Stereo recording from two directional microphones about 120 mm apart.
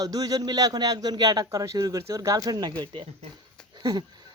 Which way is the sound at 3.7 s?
35° right (ahead or behind).